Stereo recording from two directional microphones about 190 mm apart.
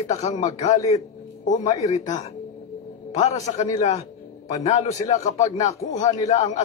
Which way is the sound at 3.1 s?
35° left (ahead or behind).